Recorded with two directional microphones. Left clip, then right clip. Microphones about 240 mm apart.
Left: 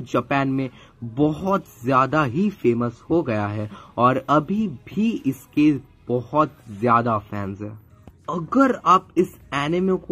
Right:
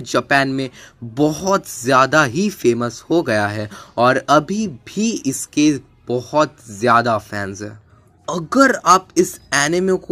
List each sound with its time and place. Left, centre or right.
0.1 s speech: centre